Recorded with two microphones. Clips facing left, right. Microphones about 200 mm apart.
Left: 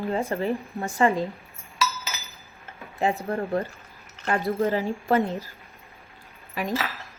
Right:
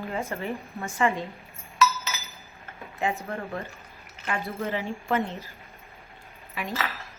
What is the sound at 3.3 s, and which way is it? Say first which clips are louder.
A woman's voice: left 7 dB; 30° left (ahead or behind).